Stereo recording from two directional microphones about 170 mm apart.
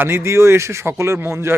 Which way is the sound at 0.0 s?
15° right (ahead or behind).